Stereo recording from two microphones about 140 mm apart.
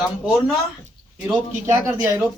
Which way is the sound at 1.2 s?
20° right (ahead or behind).